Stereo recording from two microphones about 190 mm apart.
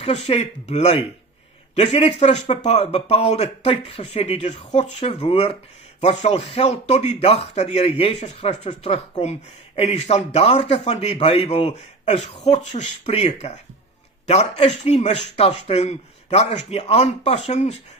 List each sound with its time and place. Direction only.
0.0 s a man's voice: 35° left (ahead or behind)